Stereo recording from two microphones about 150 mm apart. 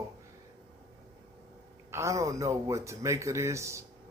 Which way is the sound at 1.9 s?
20° right (ahead or behind).